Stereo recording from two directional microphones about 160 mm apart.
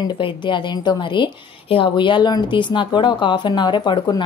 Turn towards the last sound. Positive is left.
turn(degrees=30)  # may be behind; listen again after turning